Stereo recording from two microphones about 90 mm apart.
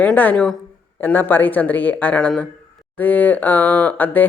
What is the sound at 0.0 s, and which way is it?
A woman's voice, 15° left (ahead or behind).